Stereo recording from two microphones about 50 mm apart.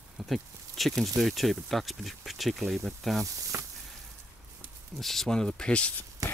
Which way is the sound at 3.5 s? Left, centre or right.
Right.